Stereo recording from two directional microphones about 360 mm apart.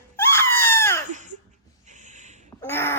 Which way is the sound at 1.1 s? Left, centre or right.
Centre.